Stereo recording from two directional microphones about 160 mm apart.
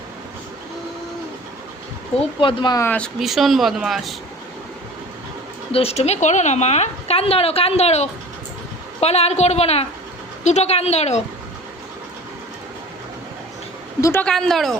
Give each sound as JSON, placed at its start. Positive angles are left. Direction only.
{"t": 2.4, "sound": "a woman's voice", "side_deg": 30}
{"t": 2.8, "sound": "speech", "side_deg": 10}
{"t": 3.2, "sound": "speech", "side_deg": 0}
{"t": 5.7, "sound": "a woman's voice", "side_deg": 40}
{"t": 14.0, "sound": "speech", "side_deg": 10}